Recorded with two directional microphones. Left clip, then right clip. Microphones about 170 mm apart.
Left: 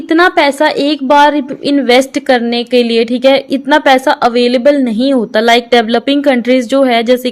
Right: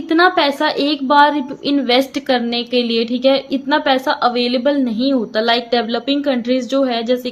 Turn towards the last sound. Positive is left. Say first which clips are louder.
# left 7 dB
turn(degrees=50)  # may be behind; listen again after turning